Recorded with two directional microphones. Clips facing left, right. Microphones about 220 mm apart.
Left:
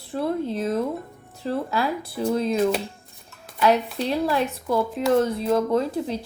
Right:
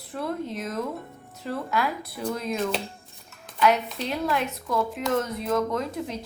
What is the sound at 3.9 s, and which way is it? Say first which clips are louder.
A woman's voice: left 4 dB; 30° left (ahead or behind).